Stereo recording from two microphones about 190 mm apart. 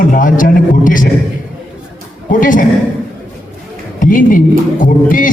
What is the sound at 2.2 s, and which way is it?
Speech, 45° left (ahead or behind).